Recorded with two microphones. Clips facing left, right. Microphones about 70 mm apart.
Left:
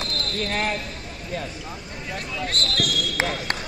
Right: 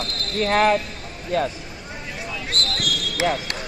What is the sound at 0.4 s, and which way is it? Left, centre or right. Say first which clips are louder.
Speech: right 9 dB; right.